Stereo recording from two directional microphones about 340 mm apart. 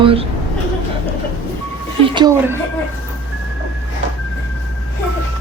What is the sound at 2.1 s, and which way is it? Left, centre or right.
Speech, centre.